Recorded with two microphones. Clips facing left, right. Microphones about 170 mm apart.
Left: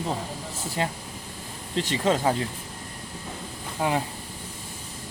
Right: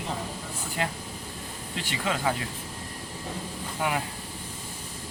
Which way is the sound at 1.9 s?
35° left (ahead or behind).